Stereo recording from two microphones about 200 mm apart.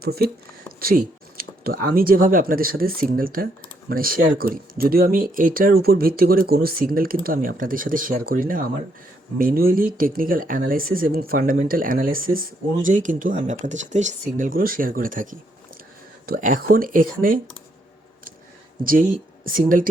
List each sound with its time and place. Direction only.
0.0 s speech: 50° right (ahead or behind)
18.8 s speech: 45° right (ahead or behind)